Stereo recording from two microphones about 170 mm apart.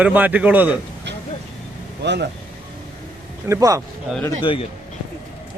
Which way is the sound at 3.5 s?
20° right (ahead or behind).